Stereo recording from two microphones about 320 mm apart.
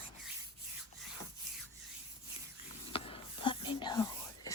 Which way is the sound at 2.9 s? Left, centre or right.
Centre.